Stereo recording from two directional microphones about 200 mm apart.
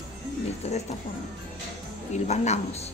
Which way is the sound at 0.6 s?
30° left (ahead or behind).